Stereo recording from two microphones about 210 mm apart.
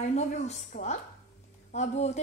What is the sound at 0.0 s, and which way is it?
A woman's voice, 35° left (ahead or behind).